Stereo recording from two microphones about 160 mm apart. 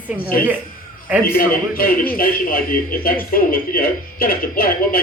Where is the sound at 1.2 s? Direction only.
65° left (ahead or behind).